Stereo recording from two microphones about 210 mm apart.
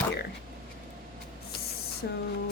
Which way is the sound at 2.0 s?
50° left (ahead or behind).